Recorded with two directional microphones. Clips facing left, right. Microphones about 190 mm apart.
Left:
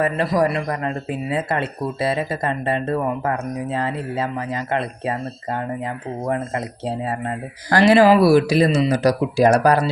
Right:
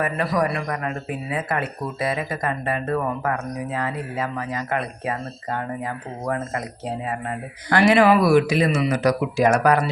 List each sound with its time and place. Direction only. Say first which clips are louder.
0.0 s a man's voice: left 4 dB; 30° left (ahead or behind)